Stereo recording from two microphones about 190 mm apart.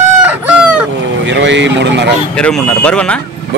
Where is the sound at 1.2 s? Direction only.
70° right (ahead or behind).